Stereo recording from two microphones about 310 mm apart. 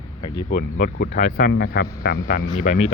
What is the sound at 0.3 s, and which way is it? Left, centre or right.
Speech, left.